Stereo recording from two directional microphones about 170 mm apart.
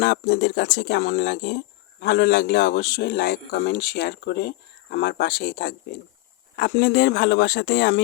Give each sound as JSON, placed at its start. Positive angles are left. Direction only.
{"t": 0.0, "sound": "speech", "side_deg": 70}